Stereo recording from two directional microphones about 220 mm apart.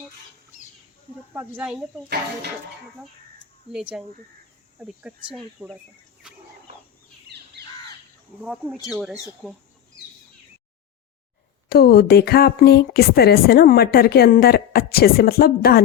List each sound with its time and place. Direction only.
1.3 s speech: 5° right (ahead or behind)
3.7 s speech: centre (ahead or behind)
8.4 s speech: 5° right (ahead or behind)
11.7 s speech: 45° left (ahead or behind)